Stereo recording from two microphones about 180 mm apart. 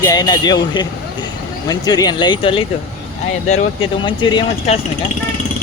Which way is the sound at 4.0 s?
25° left (ahead or behind).